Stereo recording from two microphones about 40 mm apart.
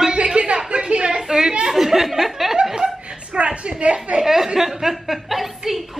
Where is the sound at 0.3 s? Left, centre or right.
Right.